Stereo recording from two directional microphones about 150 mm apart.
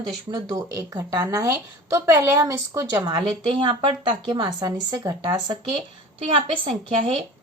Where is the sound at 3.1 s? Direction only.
30° right (ahead or behind).